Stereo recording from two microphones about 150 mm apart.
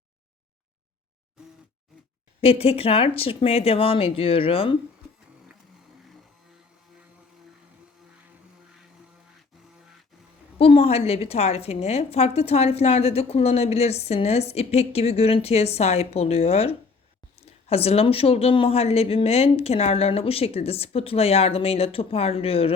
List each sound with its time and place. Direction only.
2.4 s speech: 40° left (ahead or behind)
10.6 s a woman's voice: 40° left (ahead or behind)